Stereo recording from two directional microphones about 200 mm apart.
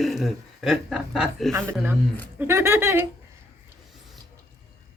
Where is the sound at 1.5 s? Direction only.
10° right (ahead or behind).